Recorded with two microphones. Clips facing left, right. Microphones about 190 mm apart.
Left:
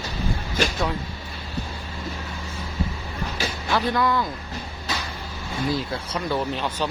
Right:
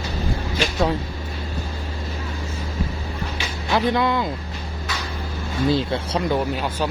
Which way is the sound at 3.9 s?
20° right (ahead or behind).